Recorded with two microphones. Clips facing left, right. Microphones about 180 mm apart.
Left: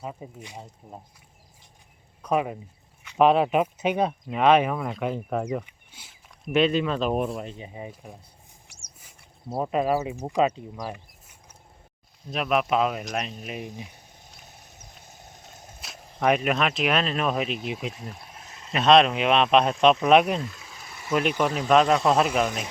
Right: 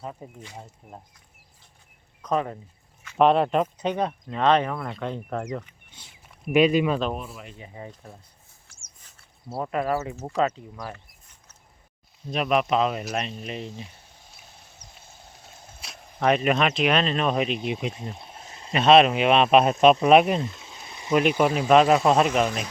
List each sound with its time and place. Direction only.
0.0 s speech: 10° left (ahead or behind)
2.2 s speech: 10° left (ahead or behind)
6.5 s speech: 10° right (ahead or behind)
7.6 s speech: 15° left (ahead or behind)
9.6 s speech: 20° left (ahead or behind)
12.3 s speech: centre (ahead or behind)
15.0 s a sound: 20° left (ahead or behind)
15.8 s speech: centre (ahead or behind)
18.1 s a sound: 25° right (ahead or behind)
18.7 s speech: centre (ahead or behind)
20.4 s a sound: 25° right (ahead or behind)
21.2 s speech: 10° right (ahead or behind)